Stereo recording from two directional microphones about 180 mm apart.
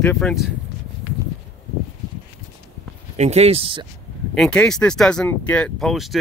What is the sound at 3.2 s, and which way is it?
Speech, 35° right (ahead or behind).